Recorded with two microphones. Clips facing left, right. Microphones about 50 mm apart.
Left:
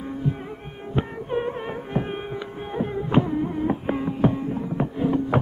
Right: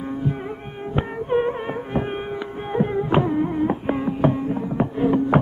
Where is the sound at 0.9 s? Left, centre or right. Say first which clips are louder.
Right 4 dB; centre.